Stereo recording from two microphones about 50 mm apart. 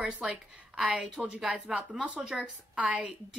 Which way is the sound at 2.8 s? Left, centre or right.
Right.